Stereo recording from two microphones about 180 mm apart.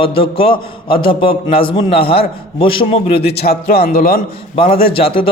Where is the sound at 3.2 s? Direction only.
60° left (ahead or behind).